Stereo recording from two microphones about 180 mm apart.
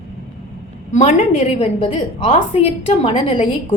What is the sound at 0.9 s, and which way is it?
A woman's voice, 40° left (ahead or behind).